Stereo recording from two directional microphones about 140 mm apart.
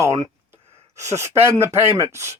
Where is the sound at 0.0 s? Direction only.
20° right (ahead or behind).